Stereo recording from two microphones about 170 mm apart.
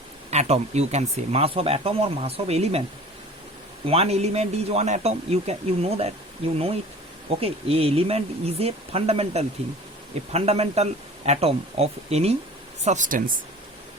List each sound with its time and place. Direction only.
0.3 s speech: 40° right (ahead or behind)
3.8 s speech: 35° right (ahead or behind); by 13.3 s 55° right (ahead or behind)